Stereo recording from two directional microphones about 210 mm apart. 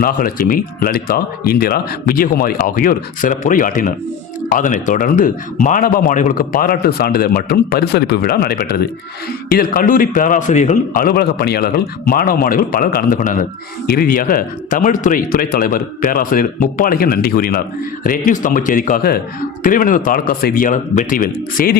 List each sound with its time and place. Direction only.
0.0 s speech: 45° left (ahead or behind)